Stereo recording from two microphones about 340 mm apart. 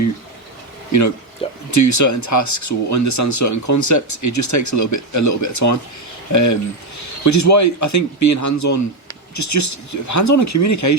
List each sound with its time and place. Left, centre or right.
0.9 s speech: left